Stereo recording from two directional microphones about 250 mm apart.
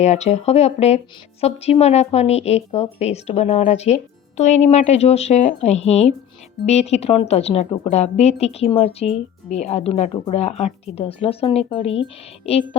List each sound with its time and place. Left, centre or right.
0.0 s a woman's voice: left